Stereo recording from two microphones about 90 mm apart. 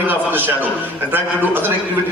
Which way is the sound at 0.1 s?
20° right (ahead or behind).